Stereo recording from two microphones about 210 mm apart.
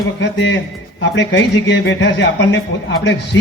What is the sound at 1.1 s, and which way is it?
Speech, 60° left (ahead or behind).